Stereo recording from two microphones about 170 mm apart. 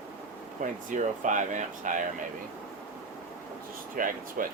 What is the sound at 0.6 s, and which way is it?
Speech, 45° right (ahead or behind).